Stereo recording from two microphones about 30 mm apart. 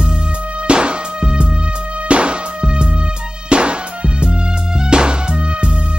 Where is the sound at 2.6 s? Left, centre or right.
Right.